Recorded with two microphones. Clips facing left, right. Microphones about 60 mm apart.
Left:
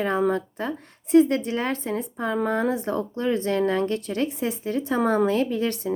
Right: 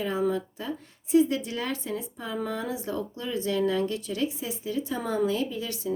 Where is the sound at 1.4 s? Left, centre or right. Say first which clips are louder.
Left 5 dB; left.